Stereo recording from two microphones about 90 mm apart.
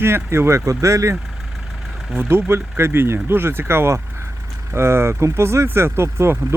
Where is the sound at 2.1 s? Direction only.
25° right (ahead or behind).